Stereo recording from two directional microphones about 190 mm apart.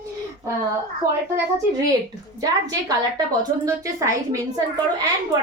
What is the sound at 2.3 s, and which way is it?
A woman's voice, 20° right (ahead or behind).